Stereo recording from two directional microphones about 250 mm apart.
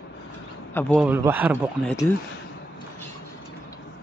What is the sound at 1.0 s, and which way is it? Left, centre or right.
Speech, centre.